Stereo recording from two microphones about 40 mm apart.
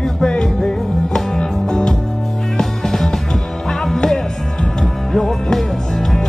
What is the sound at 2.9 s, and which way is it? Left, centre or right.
Music, centre.